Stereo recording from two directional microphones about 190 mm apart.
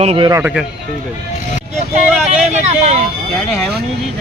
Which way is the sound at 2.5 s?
35° right (ahead or behind).